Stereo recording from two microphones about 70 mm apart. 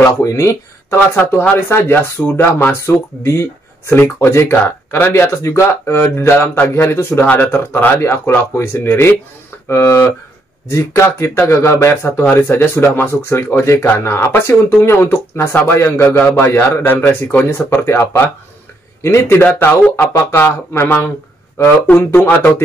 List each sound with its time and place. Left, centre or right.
0.2 s speech: left
1.1 s speech: left
17.4 s speech: left
19.3 s speech: left
20.0 s speech: left
20.4 s speech: left